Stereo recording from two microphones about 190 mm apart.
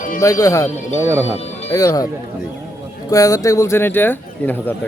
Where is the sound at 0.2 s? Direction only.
15° left (ahead or behind).